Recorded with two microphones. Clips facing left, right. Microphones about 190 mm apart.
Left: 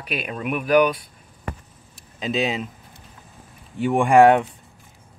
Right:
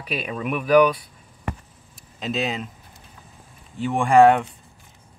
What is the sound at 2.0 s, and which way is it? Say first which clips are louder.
Speech: left 2 dB; centre (ahead or behind).